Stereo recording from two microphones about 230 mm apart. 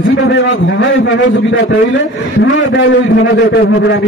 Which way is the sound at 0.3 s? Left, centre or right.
Left.